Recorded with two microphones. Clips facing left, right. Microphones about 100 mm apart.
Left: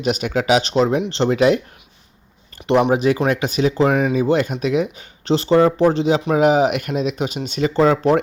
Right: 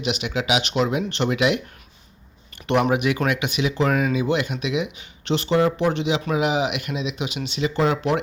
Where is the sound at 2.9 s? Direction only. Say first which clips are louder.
Left 5 dB; 30° left (ahead or behind).